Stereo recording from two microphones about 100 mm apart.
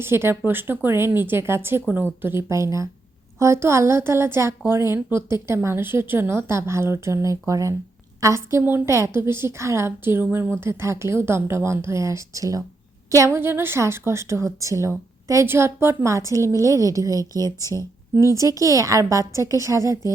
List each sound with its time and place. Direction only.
0.0 s a woman's voice: 25° right (ahead or behind)